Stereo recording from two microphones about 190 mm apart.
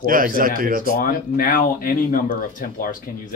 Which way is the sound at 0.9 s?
45° left (ahead or behind).